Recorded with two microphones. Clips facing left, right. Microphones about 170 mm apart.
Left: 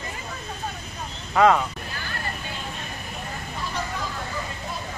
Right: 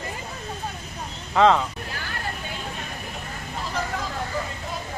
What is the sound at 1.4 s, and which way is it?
Speech, 10° left (ahead or behind).